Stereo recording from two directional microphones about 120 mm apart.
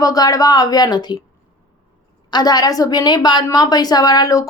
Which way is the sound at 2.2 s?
35° left (ahead or behind).